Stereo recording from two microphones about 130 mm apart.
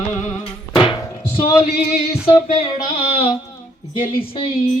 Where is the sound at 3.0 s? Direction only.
45° left (ahead or behind).